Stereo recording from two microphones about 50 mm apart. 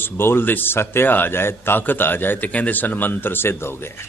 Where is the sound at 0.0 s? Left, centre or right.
Left.